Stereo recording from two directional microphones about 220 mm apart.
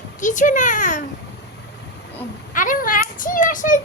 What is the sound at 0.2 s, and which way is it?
Speech, 35° left (ahead or behind).